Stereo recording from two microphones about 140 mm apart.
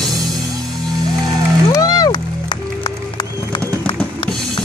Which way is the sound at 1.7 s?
25° left (ahead or behind).